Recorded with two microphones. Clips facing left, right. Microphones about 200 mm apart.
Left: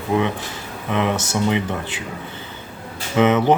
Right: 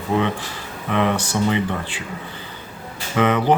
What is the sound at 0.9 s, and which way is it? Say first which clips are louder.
Speech: right 1 dB; 15° left (ahead or behind).